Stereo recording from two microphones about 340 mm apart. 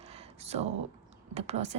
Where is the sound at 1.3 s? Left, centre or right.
Centre.